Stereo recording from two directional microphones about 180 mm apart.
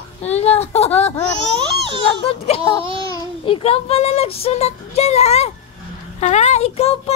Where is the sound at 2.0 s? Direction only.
35° left (ahead or behind).